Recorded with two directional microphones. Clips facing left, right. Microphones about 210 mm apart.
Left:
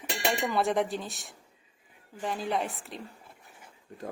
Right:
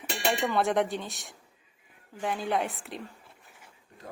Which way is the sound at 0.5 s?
Centre (ahead or behind).